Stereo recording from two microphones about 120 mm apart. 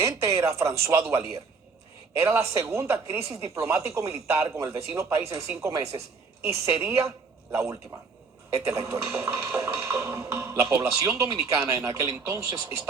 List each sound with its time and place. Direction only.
0.0 s speech: 25° right (ahead or behind)